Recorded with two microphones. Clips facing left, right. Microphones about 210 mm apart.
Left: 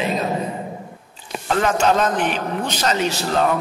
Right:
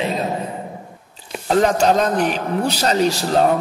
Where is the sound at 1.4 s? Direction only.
40° right (ahead or behind).